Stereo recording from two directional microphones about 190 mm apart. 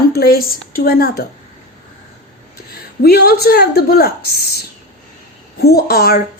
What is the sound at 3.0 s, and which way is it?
A woman's voice, 55° left (ahead or behind).